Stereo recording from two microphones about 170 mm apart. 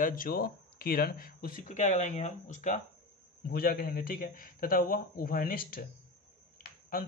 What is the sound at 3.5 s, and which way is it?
A man's voice, 60° left (ahead or behind).